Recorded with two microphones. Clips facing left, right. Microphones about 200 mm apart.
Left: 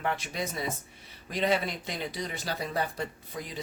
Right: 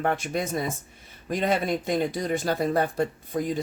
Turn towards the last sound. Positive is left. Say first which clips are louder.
# right 12 dB
turn(degrees=-50)  # may be behind; listen again after turning